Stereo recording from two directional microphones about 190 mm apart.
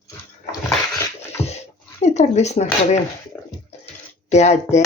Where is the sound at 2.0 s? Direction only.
35° left (ahead or behind).